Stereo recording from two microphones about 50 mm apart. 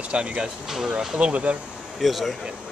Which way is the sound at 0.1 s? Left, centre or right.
Right.